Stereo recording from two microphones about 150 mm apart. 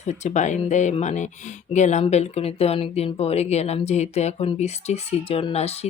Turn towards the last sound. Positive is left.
turn(degrees=45)  # may be behind; listen again after turning